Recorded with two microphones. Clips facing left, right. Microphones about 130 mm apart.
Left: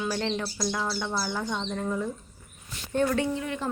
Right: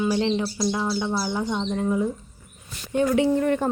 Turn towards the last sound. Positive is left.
turn(degrees=-50)  # may be behind; listen again after turning